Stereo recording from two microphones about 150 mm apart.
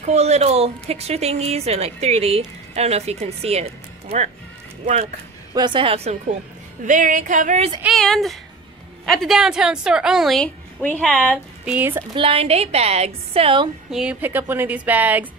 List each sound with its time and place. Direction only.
0.0 s speech: 45° right (ahead or behind)
5.5 s speech: 30° right (ahead or behind)
6.9 s music: 60° right (ahead or behind)
7.9 s a woman's voice: centre (ahead or behind)
11.6 s a woman's voice: 10° right (ahead or behind)
12.1 s speech: 35° right (ahead or behind)
13.8 s a woman's voice: 5° right (ahead or behind)